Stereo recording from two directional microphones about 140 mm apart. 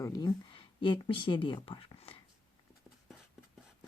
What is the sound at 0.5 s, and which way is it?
Speech, 40° left (ahead or behind).